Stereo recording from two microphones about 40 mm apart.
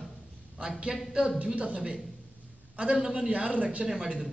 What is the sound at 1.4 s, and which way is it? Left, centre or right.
A man's voice, right.